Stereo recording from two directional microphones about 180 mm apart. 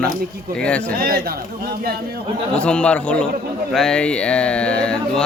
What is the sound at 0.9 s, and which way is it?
Speech, 55° right (ahead or behind).